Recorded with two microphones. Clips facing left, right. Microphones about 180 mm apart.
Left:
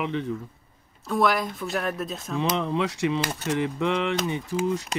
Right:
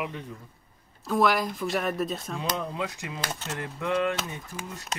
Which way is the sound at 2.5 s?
80° left.